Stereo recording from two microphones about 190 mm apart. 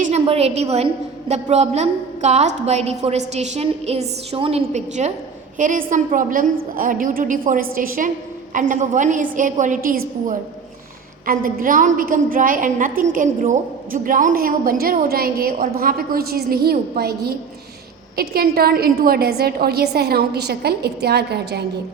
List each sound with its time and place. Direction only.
0.0 s a woman's voice: 35° right (ahead or behind)
11.3 s a woman's voice: 45° right (ahead or behind)